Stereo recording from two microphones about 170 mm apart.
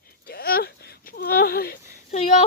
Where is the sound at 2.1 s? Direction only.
40° left (ahead or behind).